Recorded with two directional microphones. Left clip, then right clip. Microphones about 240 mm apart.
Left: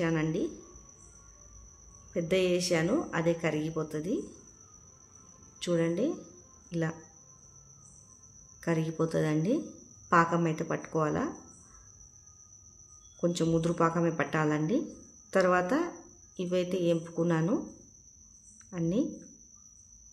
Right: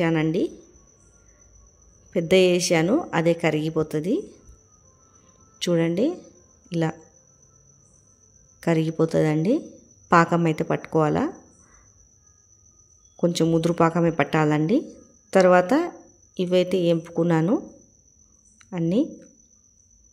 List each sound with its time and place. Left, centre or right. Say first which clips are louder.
0.0 s speech: right 8 dB; right
2.1 s speech: right 10 dB; right
5.6 s speech: right 7 dB; right
8.5 s speech: right 9 dB; right
13.2 s speech: right 8 dB; right
18.7 s speech: right 8 dB; right